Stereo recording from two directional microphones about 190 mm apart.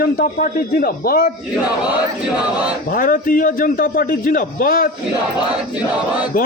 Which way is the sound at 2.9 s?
50° left (ahead or behind).